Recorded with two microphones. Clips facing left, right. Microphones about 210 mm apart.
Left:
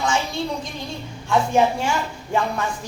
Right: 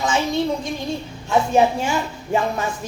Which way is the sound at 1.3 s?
20° right (ahead or behind).